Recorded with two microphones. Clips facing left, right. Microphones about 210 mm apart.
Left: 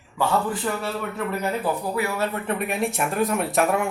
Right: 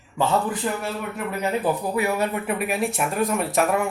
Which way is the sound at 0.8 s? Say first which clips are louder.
Left 1 dB; 20° right (ahead or behind).